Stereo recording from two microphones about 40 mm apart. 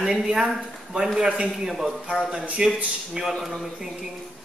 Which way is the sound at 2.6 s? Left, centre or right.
Right.